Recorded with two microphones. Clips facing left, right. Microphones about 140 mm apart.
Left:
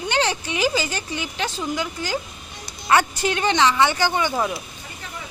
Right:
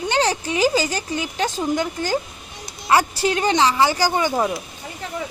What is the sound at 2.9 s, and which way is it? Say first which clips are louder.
Speech: right 1 dB; 30° right (ahead or behind).